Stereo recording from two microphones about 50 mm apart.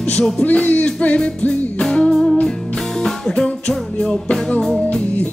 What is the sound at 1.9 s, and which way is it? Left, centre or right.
Music, centre.